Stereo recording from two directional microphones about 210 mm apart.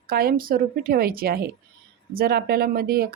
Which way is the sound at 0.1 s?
45° right (ahead or behind).